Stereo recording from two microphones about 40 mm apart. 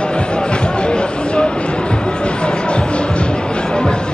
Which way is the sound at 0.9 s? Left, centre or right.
Left.